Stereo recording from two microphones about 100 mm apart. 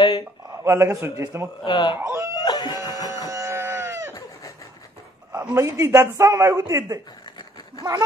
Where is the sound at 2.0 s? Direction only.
25° right (ahead or behind).